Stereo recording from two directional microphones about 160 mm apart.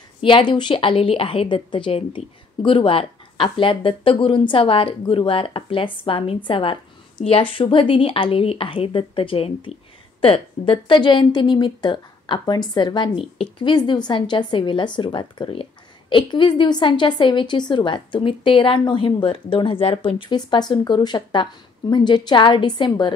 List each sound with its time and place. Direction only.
0.2 s a woman's voice: 30° left (ahead or behind)